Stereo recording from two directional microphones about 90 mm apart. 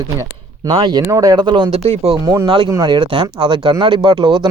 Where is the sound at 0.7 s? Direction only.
55° right (ahead or behind).